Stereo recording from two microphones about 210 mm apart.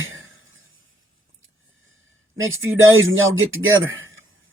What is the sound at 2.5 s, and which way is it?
Speech, 70° right (ahead or behind).